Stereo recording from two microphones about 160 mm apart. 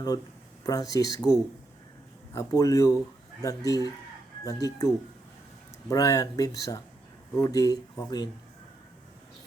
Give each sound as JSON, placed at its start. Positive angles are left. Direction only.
{"t": 0.6, "sound": "speech", "side_deg": 20}
{"t": 5.9, "sound": "speech", "side_deg": 20}